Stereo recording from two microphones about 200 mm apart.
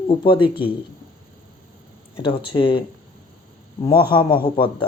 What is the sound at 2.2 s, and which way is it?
Speech, 25° left (ahead or behind).